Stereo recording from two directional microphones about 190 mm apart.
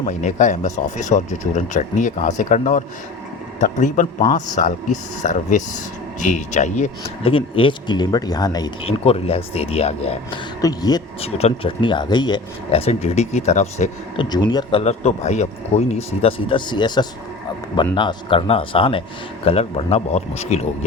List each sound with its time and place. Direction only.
0.0 s speech: 40° left (ahead or behind); by 8.9 s 20° left (ahead or behind)
8.9 s speech: 30° left (ahead or behind)
10.6 s speech: 20° left (ahead or behind)
11.2 s speech: 35° left (ahead or behind)
14.2 s speech: 20° left (ahead or behind)